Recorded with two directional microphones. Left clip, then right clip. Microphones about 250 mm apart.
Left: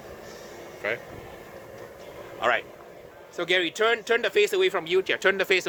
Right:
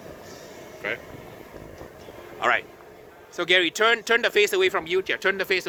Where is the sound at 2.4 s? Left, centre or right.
Right.